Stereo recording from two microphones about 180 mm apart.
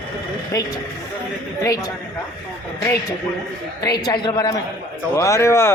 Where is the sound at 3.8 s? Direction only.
20° left (ahead or behind).